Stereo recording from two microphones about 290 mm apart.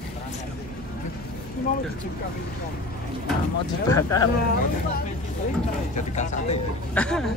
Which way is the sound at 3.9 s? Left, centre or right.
Centre.